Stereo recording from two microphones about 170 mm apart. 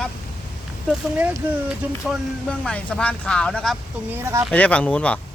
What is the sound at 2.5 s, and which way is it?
Speech, 5° left (ahead or behind).